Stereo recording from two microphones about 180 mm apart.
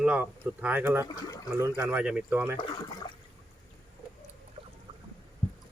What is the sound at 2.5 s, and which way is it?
Speech, 25° left (ahead or behind).